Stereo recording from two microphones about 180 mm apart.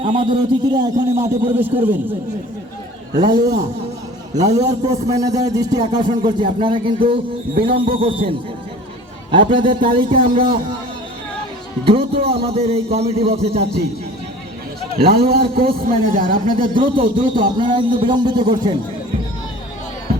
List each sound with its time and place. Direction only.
0.0 s a man's voice: 30° right (ahead or behind); by 2.0 s 10° right (ahead or behind)
3.2 s a man's voice: 25° right (ahead or behind)
11.9 s a man's voice: 30° right (ahead or behind)
14.9 s a man's voice: 60° right (ahead or behind)
16.6 s a man's voice: 30° right (ahead or behind)